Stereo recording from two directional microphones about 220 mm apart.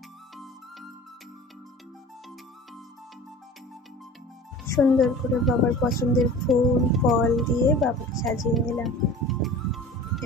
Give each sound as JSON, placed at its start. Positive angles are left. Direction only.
{"t": 4.7, "sound": "a woman's voice", "side_deg": 0}